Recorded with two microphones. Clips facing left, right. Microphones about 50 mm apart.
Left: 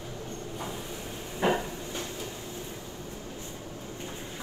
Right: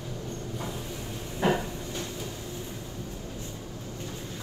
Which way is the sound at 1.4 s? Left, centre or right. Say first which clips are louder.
Right 1 dB; left.